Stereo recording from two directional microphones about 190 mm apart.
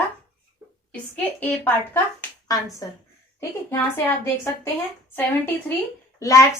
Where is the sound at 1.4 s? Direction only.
10° left (ahead or behind).